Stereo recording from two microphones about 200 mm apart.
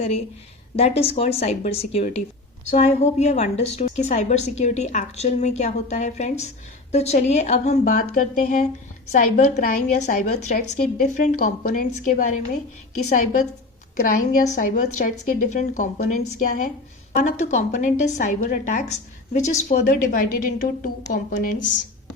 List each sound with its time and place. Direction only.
0.8 s a woman's voice: 30° left (ahead or behind); by 21.5 s 45° left (ahead or behind)